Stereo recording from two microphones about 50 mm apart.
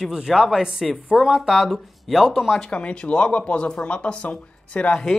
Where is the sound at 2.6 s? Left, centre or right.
Centre.